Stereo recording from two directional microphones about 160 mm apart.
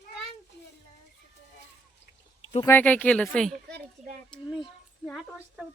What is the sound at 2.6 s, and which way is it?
Speech, 10° left (ahead or behind).